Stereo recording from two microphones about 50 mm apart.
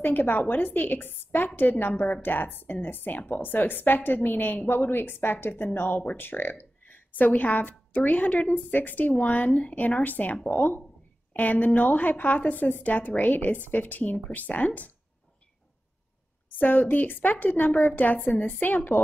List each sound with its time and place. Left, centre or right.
0.0 s a woman's voice: left
16.4 s a woman's voice: left